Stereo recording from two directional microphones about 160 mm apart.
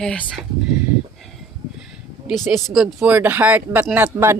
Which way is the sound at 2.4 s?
Centre (ahead or behind).